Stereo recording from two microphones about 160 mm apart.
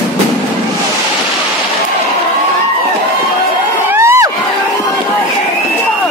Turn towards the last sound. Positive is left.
turn(degrees=-15)  # may be behind; listen again after turning